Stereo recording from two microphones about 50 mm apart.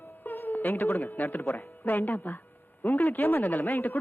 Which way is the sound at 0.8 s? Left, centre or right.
Left.